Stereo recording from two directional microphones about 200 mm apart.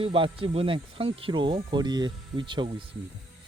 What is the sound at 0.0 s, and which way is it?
Speech, 25° right (ahead or behind).